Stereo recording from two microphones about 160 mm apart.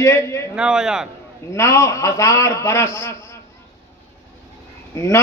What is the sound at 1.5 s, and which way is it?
A man's voice, 20° left (ahead or behind).